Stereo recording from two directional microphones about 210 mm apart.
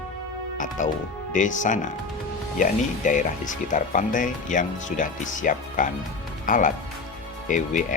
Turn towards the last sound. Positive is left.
turn(degrees=35)  # may be behind; listen again after turning